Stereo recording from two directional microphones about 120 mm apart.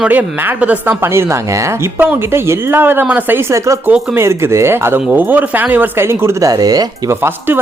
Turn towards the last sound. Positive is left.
turn(degrees=-15)  # may be behind; listen again after turning